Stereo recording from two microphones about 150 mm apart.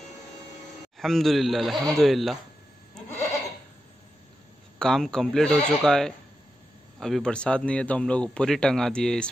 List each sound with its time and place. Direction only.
0.9 s speech: centre (ahead or behind)
4.7 s speech: 5° left (ahead or behind)